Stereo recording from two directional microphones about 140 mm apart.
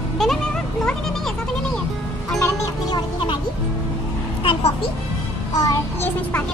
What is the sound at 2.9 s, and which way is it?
Speech, 35° left (ahead or behind).